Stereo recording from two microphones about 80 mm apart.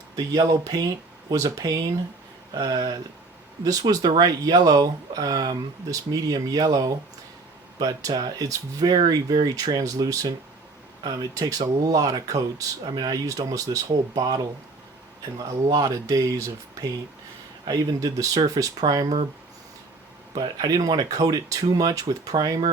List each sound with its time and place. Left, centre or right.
0.2 s speech: right
8.4 s speech: right
17.7 s speech: right
20.3 s speech: right